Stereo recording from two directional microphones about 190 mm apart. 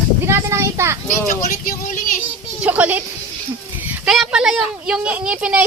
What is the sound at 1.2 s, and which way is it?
Speech, 45° left (ahead or behind).